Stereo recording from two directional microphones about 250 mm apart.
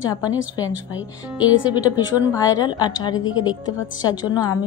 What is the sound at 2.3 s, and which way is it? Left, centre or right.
A woman's voice, centre.